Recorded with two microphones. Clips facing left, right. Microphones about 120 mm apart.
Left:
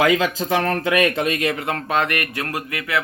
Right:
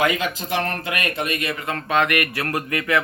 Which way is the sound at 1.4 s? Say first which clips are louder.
Left 4 dB; 85° left.